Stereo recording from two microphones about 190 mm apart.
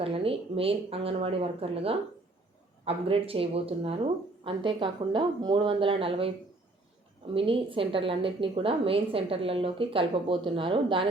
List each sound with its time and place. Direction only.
0.0 s a woman's voice: 30° right (ahead or behind)
7.3 s a woman's voice: 30° right (ahead or behind)